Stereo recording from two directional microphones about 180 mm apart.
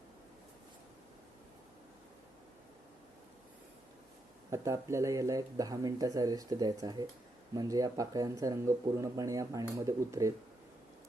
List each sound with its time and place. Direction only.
4.5 s speech: 15° right (ahead or behind)